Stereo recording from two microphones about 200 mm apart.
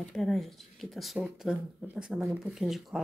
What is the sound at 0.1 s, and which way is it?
Speech, centre (ahead or behind).